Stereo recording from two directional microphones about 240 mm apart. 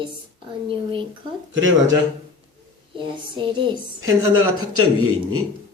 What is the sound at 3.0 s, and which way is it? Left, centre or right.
Speech, centre.